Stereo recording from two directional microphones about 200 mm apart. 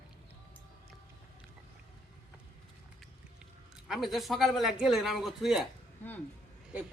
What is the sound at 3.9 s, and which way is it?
Speech, centre (ahead or behind).